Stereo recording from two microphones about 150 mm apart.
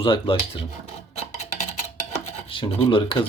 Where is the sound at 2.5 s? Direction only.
35° left (ahead or behind).